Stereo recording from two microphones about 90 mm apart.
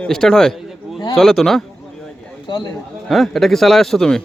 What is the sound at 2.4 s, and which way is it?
Speech, 55° left (ahead or behind).